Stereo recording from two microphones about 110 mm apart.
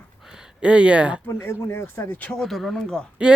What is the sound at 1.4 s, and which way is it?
Speech, 25° left (ahead or behind).